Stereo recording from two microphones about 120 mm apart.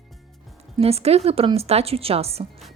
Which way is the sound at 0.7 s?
55° right (ahead or behind).